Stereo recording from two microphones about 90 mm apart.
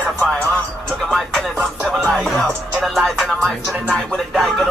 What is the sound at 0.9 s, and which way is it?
Music, 5° left (ahead or behind).